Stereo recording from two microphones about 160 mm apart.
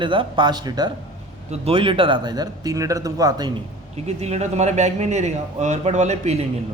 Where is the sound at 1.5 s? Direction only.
40° right (ahead or behind).